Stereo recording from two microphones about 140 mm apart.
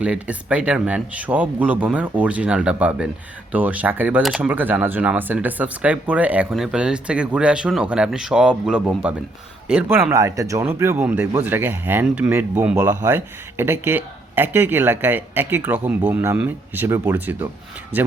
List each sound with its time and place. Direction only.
0.0 s speech: 10° right (ahead or behind)